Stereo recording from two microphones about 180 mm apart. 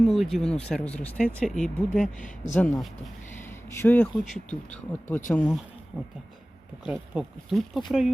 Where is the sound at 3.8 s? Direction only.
10° left (ahead or behind).